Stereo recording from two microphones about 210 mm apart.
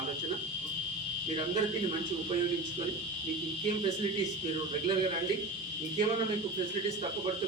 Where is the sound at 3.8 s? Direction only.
30° right (ahead or behind).